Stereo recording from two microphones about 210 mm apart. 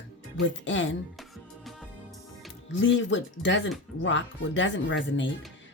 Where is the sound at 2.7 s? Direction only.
60° left (ahead or behind).